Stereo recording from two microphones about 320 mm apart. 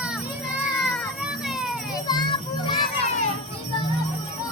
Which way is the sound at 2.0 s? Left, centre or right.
Centre.